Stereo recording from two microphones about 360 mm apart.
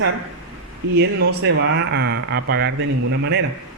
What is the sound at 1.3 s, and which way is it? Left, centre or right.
Speech, right.